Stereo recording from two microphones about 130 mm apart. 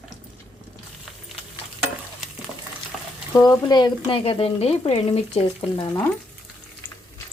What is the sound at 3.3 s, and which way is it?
Speech, 30° left (ahead or behind).